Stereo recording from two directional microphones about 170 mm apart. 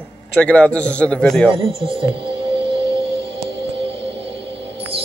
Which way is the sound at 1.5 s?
30° right (ahead or behind).